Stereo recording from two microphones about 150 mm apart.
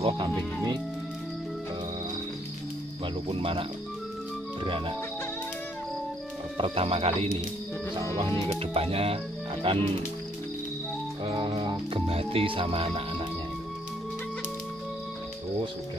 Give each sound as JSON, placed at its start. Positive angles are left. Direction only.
{"t": 3.3, "sound": "speech", "side_deg": -35}
{"t": 4.6, "sound": "speech", "side_deg": -35}
{"t": 6.6, "sound": "speech", "side_deg": -40}
{"t": 8.5, "sound": "speech", "side_deg": -40}
{"t": 11.3, "sound": "speech", "side_deg": -30}